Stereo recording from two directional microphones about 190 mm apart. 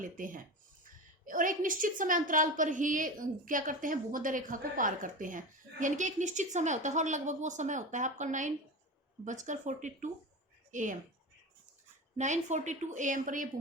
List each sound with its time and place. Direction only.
0.0 s a woman's voice: 45° right (ahead or behind)
12.1 s a woman's voice: 40° right (ahead or behind)